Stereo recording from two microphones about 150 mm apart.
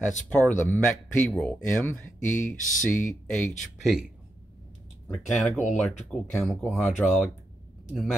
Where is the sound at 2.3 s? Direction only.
60° left (ahead or behind).